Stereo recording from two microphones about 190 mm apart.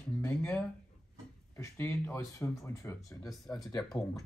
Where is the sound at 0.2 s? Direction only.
10° left (ahead or behind).